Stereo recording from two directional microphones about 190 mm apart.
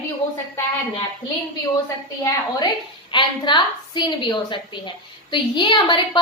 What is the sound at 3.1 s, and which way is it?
A woman's voice, 25° left (ahead or behind).